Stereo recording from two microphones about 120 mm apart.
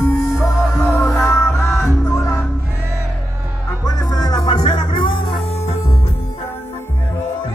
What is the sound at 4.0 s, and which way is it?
Music, 35° left (ahead or behind).